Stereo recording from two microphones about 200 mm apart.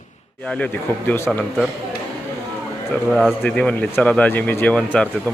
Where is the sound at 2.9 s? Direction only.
Centre (ahead or behind).